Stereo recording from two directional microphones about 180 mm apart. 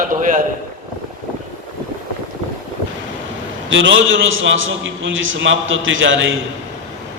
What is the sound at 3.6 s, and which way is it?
A man's voice, 90° right.